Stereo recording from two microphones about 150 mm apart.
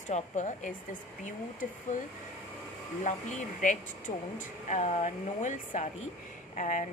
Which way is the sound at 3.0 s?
55° left (ahead or behind).